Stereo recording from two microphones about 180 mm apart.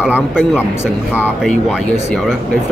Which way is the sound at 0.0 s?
5° right (ahead or behind).